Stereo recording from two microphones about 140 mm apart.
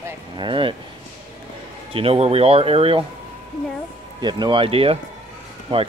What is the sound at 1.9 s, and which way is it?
Speech, 45° right (ahead or behind).